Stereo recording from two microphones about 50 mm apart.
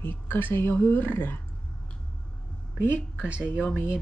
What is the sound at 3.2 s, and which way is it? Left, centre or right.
Speech, right.